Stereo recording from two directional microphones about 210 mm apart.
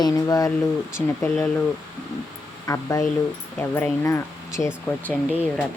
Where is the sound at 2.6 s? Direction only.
15° left (ahead or behind).